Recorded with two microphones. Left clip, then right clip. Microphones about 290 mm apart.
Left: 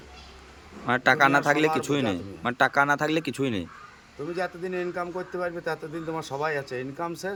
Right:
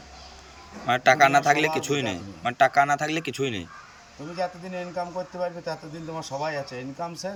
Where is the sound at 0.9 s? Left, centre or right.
Centre.